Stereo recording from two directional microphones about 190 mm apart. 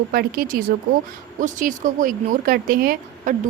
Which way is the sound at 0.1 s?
50° right (ahead or behind).